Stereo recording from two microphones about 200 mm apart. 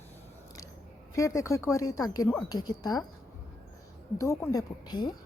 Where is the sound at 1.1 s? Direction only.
15° left (ahead or behind).